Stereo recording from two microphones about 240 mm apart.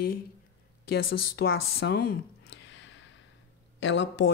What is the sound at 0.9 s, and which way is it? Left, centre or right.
Speech, left.